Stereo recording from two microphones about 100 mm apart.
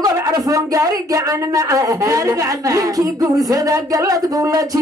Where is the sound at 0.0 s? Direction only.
35° right (ahead or behind).